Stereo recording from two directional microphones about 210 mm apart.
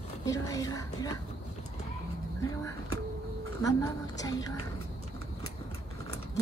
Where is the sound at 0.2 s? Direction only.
15° left (ahead or behind).